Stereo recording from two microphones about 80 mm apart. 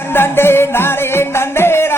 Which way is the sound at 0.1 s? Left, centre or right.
Left.